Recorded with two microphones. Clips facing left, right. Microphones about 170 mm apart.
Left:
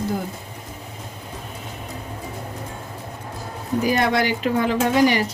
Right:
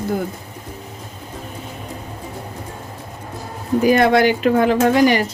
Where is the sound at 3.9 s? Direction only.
60° right (ahead or behind).